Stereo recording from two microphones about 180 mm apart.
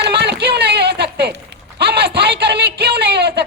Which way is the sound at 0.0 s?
70° right (ahead or behind).